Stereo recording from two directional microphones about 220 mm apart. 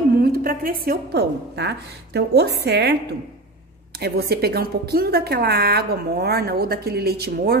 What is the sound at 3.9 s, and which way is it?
A woman's voice, 45° right (ahead or behind).